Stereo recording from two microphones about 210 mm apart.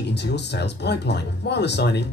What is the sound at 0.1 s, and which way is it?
Speech, 55° left (ahead or behind).